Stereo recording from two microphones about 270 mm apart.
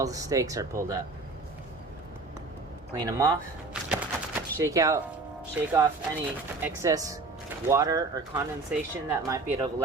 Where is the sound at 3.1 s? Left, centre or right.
Centre.